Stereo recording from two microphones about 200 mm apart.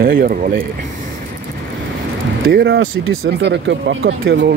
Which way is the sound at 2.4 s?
55° right (ahead or behind).